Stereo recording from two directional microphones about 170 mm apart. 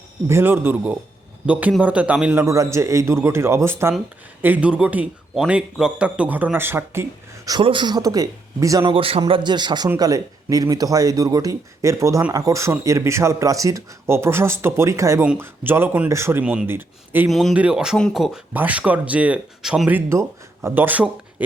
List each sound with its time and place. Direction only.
0.3 s a man's voice: 15° right (ahead or behind)
17.2 s speech: centre (ahead or behind)